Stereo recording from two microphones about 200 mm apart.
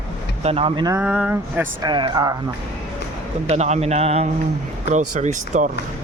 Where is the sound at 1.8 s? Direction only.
20° right (ahead or behind).